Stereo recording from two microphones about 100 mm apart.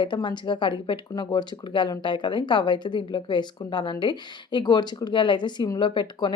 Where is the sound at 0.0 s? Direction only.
50° left (ahead or behind).